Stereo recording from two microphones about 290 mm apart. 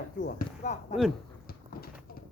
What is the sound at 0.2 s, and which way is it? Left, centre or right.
Speech, left.